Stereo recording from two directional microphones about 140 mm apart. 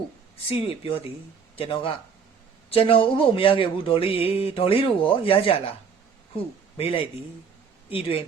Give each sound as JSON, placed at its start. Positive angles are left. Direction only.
{"t": 0.5, "sound": "a man's voice", "side_deg": 40}